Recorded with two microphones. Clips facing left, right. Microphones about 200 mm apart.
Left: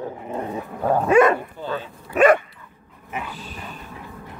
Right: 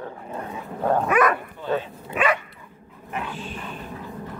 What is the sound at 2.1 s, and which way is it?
Dog, 45° left (ahead or behind).